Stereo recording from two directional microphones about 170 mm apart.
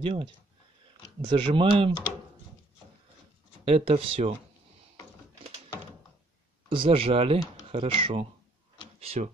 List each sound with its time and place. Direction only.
0.0 s speech: 30° right (ahead or behind)
3.6 s speech: 35° right (ahead or behind)
6.7 s speech: 30° right (ahead or behind)